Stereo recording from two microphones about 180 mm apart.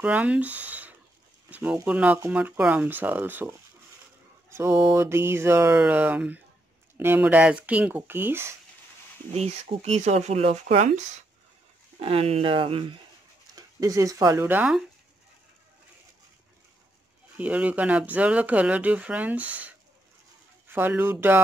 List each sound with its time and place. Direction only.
0.0 s speech: 5° right (ahead or behind)
9.3 s speech: 35° right (ahead or behind)
13.6 s speech: 20° right (ahead or behind)
17.4 s speech: 10° right (ahead or behind)